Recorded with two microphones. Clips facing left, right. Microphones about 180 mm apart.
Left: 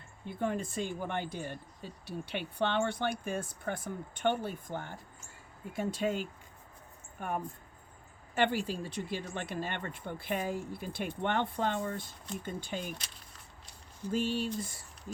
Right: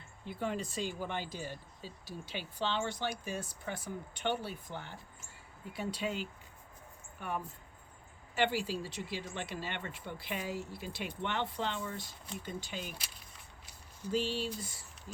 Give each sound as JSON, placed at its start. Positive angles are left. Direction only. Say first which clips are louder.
{"t": 0.3, "sound": "speech", "louder": "left 3 dB", "side_deg": 50}
{"t": 14.1, "sound": "speech", "louder": "left 2 dB", "side_deg": 50}